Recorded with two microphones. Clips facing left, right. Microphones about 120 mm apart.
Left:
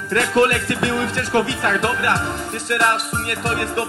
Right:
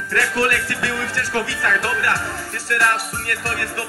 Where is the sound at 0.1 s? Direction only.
20° left (ahead or behind).